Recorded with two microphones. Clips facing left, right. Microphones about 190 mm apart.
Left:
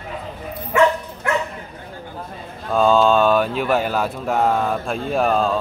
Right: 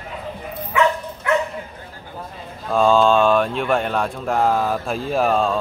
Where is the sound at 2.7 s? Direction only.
Centre (ahead or behind).